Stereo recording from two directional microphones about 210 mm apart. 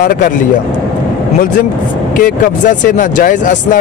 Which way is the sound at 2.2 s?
40° left (ahead or behind).